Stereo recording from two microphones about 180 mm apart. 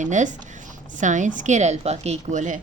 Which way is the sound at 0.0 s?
45° right (ahead or behind).